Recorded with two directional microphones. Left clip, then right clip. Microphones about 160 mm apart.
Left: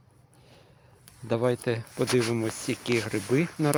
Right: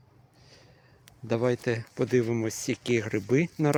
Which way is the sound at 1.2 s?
25° right (ahead or behind).